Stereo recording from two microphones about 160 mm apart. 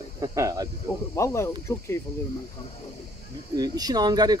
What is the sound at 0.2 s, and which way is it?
Speech, 20° right (ahead or behind).